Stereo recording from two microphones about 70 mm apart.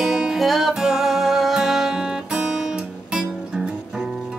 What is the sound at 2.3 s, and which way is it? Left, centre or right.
Guitar, centre.